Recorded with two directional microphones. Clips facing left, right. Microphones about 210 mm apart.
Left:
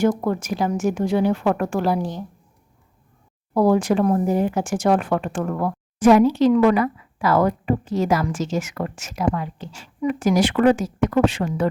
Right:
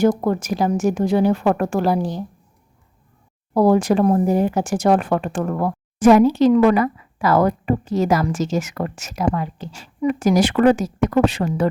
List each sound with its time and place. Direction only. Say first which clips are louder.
0.0 s speech: right 3 dB; 40° right (ahead or behind)
3.5 s speech: right 2 dB; 35° right (ahead or behind)